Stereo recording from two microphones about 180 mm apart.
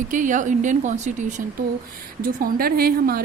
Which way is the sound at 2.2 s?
55° right (ahead or behind).